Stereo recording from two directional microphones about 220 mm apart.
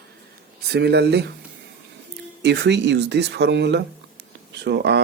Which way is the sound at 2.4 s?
50° right (ahead or behind).